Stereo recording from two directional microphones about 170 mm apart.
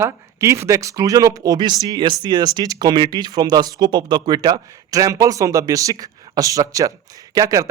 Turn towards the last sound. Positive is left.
turn(degrees=-20)  # may be behind; listen again after turning